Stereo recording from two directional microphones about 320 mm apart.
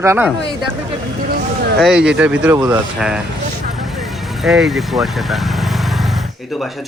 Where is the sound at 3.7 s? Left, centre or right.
Centre.